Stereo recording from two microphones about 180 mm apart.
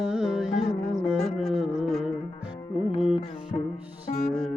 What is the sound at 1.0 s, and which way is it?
Music, 35° left (ahead or behind).